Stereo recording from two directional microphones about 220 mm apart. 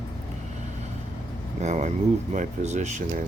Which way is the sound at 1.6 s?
30° right (ahead or behind).